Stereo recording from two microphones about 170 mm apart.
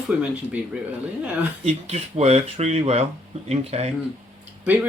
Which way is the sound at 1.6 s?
40° right (ahead or behind).